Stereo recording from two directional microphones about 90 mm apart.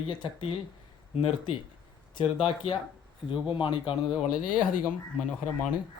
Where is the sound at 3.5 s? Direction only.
65° left (ahead or behind).